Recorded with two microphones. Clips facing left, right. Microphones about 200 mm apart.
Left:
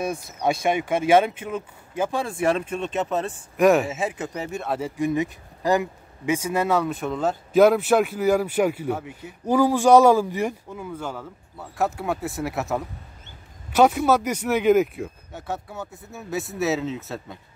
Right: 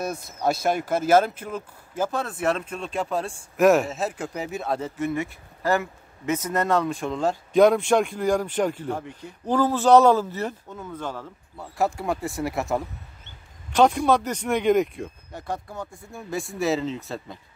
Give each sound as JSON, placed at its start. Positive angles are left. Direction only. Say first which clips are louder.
{"t": 0.0, "sound": "speech", "louder": "left 1 dB", "side_deg": -5}
{"t": 4.7, "sound": "speech", "louder": "left 5 dB", "side_deg": 10}